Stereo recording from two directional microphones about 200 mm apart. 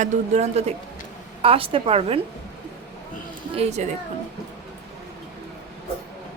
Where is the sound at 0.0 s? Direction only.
35° right (ahead or behind).